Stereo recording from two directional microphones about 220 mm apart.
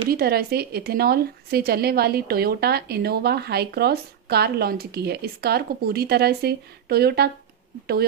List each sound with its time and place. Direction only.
0.1 s a woman's voice: 45° right (ahead or behind)